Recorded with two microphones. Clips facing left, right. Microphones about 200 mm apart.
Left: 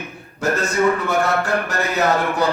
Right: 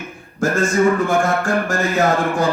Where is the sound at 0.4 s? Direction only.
50° right (ahead or behind).